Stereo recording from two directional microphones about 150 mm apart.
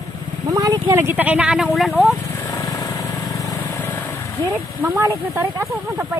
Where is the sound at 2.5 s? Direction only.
25° left (ahead or behind).